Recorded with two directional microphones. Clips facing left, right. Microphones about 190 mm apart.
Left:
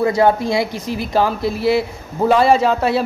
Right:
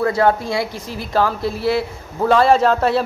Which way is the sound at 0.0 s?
15° left (ahead or behind).